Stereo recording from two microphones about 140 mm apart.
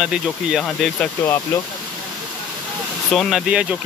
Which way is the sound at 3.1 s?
5° left (ahead or behind).